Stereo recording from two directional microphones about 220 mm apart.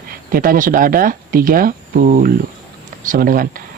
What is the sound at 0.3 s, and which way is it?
Speech, 40° right (ahead or behind).